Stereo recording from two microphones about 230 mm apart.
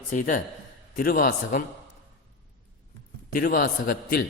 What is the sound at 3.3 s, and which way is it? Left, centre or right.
Speech, left.